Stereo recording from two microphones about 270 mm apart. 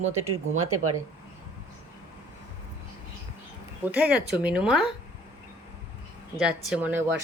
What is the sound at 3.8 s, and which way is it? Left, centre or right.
Speech, centre.